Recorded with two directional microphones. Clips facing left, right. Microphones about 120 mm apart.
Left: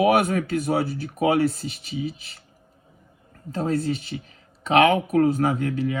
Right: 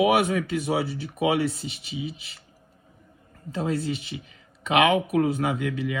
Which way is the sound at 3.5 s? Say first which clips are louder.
Left 3 dB; 40° left (ahead or behind).